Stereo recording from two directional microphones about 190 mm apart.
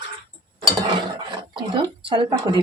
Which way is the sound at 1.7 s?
25° right (ahead or behind).